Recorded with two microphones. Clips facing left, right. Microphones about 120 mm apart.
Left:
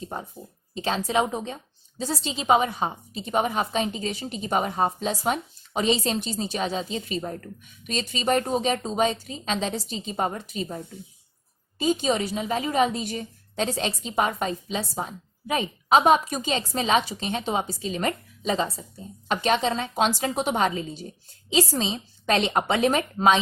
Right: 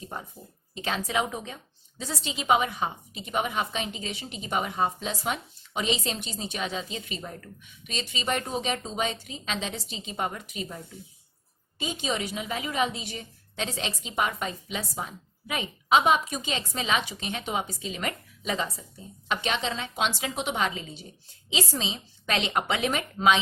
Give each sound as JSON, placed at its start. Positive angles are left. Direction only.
{"t": 0.7, "sound": "a woman's voice", "side_deg": 30}
{"t": 19.3, "sound": "a woman's voice", "side_deg": 40}